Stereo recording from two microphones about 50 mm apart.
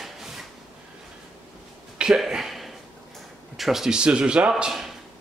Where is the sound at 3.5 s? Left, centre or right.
Centre.